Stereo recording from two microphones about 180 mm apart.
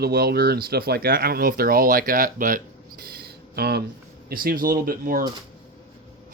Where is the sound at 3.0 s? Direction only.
60° right (ahead or behind).